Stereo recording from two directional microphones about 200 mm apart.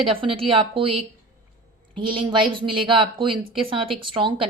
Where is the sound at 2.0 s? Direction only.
25° right (ahead or behind).